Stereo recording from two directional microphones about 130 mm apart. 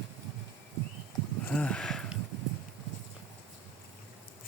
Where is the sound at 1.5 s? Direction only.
10° left (ahead or behind).